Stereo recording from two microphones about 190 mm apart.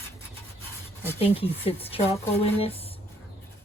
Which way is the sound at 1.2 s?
30° left (ahead or behind).